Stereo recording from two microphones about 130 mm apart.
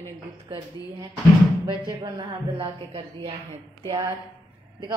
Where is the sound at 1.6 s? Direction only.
40° right (ahead or behind).